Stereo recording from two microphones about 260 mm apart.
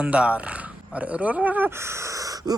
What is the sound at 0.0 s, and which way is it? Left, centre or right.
Speech, centre.